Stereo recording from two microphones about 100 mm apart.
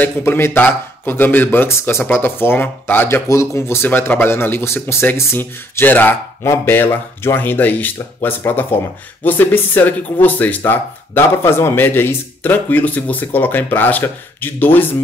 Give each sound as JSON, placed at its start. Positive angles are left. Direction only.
{"t": 0.0, "sound": "speech", "side_deg": 20}